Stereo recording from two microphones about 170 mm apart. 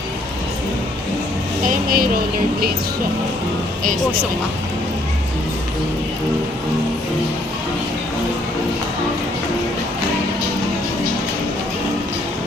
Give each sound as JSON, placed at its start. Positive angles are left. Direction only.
{"t": 1.6, "sound": "speech", "side_deg": -55}